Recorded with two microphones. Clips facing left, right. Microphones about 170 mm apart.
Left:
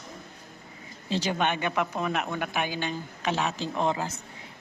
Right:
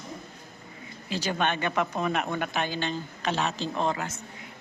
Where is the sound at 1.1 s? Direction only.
20° left (ahead or behind).